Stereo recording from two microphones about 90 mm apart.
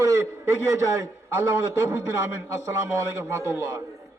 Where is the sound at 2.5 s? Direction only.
35° right (ahead or behind).